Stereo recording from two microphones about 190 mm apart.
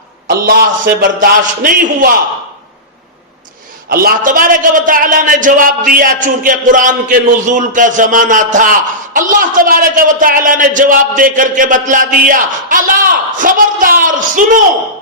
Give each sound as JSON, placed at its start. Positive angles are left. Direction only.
{"t": 0.3, "sound": "a man's voice", "side_deg": -50}
{"t": 3.8, "sound": "a man's voice", "side_deg": -50}
{"t": 13.4, "sound": "a sound", "side_deg": -45}